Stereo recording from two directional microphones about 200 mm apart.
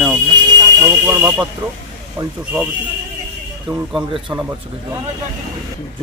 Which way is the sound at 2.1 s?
10° right (ahead or behind).